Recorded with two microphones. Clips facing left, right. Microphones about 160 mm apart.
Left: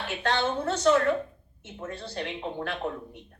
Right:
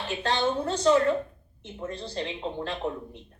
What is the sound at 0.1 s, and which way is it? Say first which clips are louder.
A woman's voice: right 1 dB; 15° right (ahead or behind).